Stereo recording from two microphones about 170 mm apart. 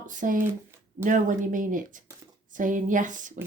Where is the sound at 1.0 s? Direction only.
50° right (ahead or behind).